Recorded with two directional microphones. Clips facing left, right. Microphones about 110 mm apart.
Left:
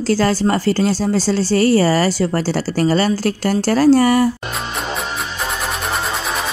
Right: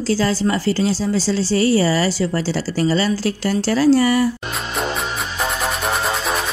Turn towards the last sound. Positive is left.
turn(degrees=0)  # may be behind; listen again after turning